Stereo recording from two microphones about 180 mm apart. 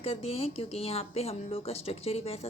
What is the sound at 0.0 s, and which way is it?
A woman's voice, 35° left (ahead or behind).